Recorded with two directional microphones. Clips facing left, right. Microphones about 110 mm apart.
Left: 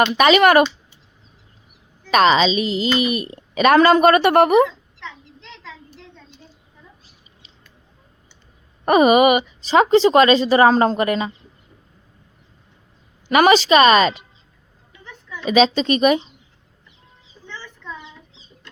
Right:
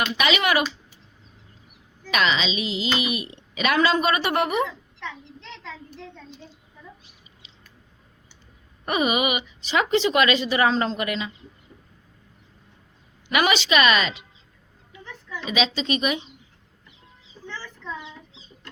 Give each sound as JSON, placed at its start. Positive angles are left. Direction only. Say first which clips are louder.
{"t": 0.2, "sound": "speech", "louder": "left 10 dB", "side_deg": 45}
{"t": 2.0, "sound": "a woman's voice", "louder": "left 9 dB", "side_deg": 40}
{"t": 3.8, "sound": "a woman's voice", "louder": "left 8 dB", "side_deg": 60}
{"t": 8.8, "sound": "speech", "louder": "left 10 dB", "side_deg": 45}
{"t": 9.7, "sound": "a woman's voice", "louder": "left 8 dB", "side_deg": 35}
{"t": 13.2, "sound": "a woman's voice", "louder": "left 8 dB", "side_deg": 40}
{"t": 15.4, "sound": "speech", "louder": "left 9 dB", "side_deg": 45}